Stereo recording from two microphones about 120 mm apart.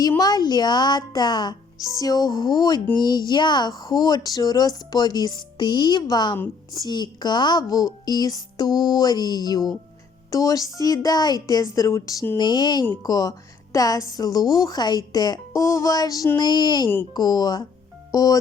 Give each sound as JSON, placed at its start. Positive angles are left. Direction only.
{"t": 0.2, "sound": "a woman's voice", "side_deg": 35}
{"t": 12.4, "sound": "speech", "side_deg": 35}